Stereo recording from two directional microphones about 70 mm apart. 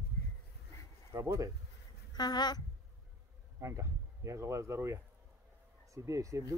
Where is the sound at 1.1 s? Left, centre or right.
Right.